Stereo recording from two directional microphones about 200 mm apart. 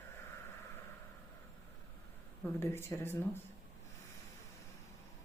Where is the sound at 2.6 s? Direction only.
10° left (ahead or behind).